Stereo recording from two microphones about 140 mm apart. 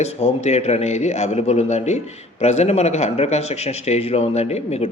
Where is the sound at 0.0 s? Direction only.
50° left (ahead or behind).